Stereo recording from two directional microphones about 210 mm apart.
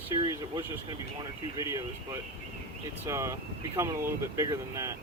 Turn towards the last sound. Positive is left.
turn(degrees=-15)  # may be behind; listen again after turning